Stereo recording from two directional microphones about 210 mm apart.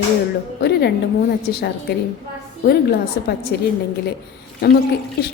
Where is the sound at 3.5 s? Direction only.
50° left (ahead or behind).